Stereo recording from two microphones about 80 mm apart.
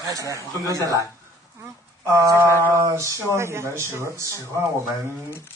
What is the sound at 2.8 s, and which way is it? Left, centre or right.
Speech, right.